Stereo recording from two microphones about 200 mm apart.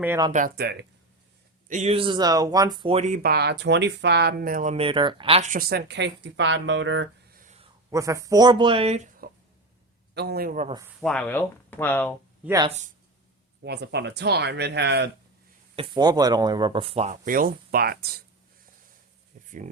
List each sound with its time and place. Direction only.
0.3 s speech: 40° right (ahead or behind)
0.5 s speech: 55° right (ahead or behind)
1.6 s speech: 35° right (ahead or behind)
3.2 s speech: 55° right (ahead or behind)
7.9 s speech: 15° right (ahead or behind)
9.2 s a sound: 45° right (ahead or behind)
10.2 s speech: 50° right (ahead or behind)
11.0 s speech: 5° left (ahead or behind)
12.6 s speech: 35° right (ahead or behind)
13.6 s speech: 55° right (ahead or behind)
15.7 s speech: 25° right (ahead or behind); by 18.2 s 50° right (ahead or behind)
19.5 s speech: 40° right (ahead or behind)